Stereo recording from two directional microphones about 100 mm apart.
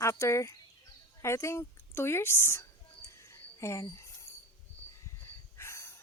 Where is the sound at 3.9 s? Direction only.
30° left (ahead or behind).